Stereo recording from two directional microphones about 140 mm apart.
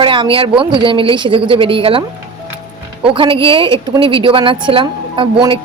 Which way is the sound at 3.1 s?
40° right (ahead or behind).